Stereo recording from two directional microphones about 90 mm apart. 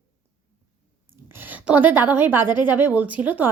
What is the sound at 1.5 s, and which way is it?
A woman's voice, 20° right (ahead or behind).